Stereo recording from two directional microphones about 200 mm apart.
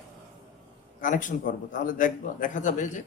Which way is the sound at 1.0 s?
40° left (ahead or behind).